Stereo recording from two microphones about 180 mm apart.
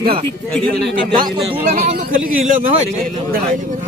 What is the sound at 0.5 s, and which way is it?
Speech, 5° left (ahead or behind).